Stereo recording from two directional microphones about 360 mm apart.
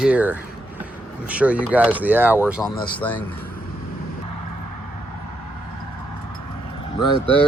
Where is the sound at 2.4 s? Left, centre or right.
Centre.